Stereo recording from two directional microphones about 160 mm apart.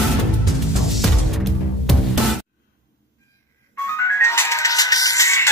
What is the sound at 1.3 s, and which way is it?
Music, centre (ahead or behind).